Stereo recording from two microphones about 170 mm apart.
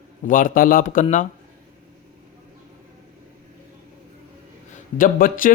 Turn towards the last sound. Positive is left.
turn(degrees=55)  # may be behind; listen again after turning